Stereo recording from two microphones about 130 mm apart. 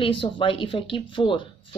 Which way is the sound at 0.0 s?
45° left (ahead or behind).